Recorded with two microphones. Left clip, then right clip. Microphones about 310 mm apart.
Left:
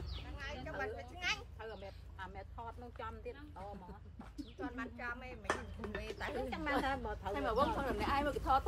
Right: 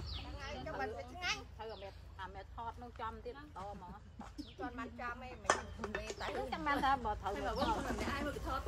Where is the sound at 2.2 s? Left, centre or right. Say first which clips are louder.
Right 2 dB; centre.